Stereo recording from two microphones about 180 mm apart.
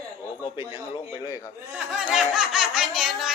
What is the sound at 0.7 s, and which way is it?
Speech, 25° left (ahead or behind).